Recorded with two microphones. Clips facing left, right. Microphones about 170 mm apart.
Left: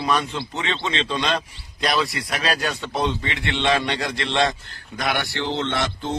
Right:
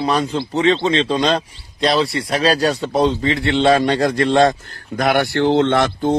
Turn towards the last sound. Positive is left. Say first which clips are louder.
# right 9 dB
turn(degrees=-55)  # may be behind; listen again after turning